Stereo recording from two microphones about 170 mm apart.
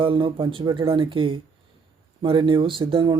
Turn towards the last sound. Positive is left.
turn(degrees=-30)  # may be behind; listen again after turning